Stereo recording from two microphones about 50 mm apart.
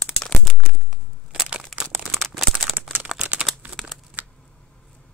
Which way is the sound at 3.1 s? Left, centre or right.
Right.